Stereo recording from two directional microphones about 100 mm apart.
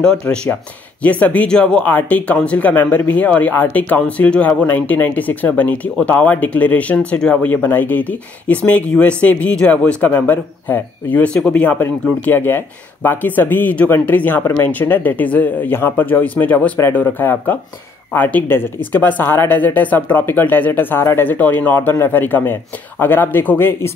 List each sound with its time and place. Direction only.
1.2 s a man's voice: 15° left (ahead or behind)